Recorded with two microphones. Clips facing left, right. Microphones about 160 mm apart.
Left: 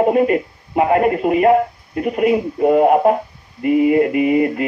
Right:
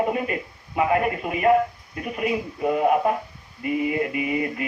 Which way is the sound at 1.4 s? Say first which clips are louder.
Left 1 dB; 40° left (ahead or behind).